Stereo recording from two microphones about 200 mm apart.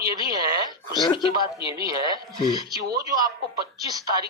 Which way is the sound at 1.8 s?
20° right (ahead or behind).